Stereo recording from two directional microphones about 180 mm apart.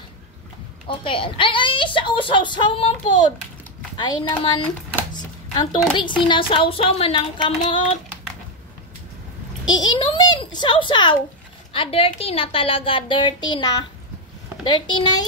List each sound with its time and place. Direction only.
0.8 s a woman's voice: 30° left (ahead or behind)
9.7 s a child's voice: 25° left (ahead or behind)